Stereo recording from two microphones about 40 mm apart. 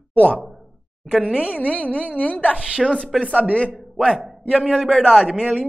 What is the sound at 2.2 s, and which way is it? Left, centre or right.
Speech, left.